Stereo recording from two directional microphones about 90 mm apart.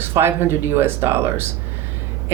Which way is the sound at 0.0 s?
25° right (ahead or behind).